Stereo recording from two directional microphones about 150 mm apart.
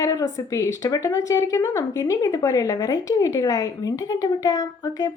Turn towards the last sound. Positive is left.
turn(degrees=25)  # may be behind; listen again after turning